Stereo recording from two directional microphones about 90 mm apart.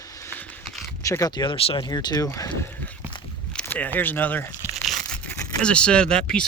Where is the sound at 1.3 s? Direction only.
65° left (ahead or behind); by 1.8 s 80° left.